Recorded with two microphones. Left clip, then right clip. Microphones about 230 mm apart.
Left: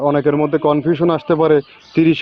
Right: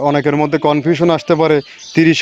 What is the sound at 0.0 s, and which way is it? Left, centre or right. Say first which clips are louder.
A man's voice: right 1 dB; right.